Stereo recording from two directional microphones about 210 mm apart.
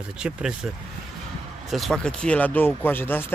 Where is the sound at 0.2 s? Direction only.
5° right (ahead or behind).